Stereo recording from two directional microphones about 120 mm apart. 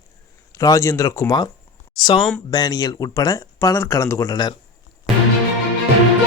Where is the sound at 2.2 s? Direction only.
5° left (ahead or behind).